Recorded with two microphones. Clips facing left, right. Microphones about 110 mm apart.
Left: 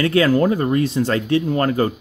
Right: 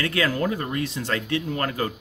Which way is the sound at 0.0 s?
30° left (ahead or behind).